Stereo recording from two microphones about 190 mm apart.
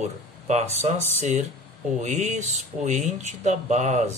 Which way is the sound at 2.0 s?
40° right (ahead or behind).